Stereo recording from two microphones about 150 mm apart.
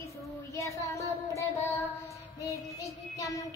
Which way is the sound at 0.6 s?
20° left (ahead or behind).